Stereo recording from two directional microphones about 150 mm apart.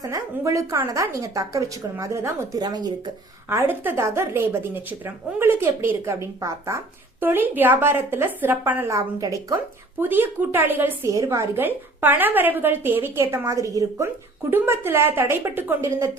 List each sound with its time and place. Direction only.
0.0 s a woman's voice: 20° right (ahead or behind)
3.5 s a woman's voice: 15° right (ahead or behind)